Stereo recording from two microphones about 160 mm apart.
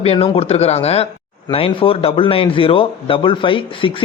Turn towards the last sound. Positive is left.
turn(degrees=35)  # may be behind; listen again after turning